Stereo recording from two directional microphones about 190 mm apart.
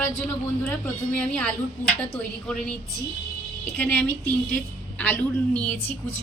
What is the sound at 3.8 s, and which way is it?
A woman's voice, 10° left (ahead or behind).